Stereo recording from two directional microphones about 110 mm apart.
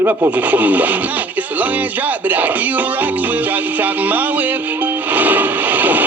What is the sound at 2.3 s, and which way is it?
Speech, 15° right (ahead or behind).